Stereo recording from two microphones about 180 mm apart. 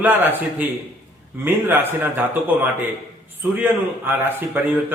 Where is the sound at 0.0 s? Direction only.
10° right (ahead or behind).